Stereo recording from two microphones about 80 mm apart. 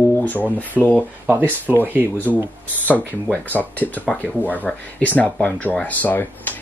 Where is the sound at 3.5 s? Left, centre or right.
Centre.